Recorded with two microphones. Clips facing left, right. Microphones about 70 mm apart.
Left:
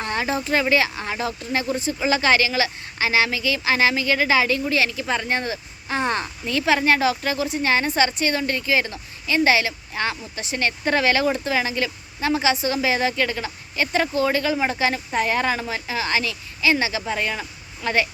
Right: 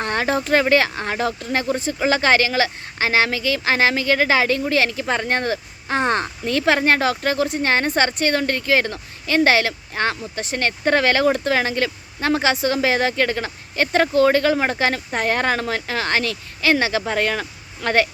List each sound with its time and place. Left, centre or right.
0.0 s speech: right